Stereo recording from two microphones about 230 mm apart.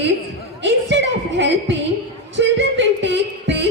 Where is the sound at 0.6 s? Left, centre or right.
Right.